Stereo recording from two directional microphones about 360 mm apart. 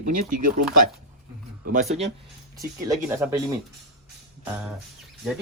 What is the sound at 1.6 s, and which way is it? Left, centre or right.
Speech, right.